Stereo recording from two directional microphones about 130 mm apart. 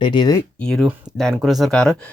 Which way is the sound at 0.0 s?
35° left (ahead or behind).